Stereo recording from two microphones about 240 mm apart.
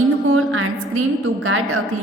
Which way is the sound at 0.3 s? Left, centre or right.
Right.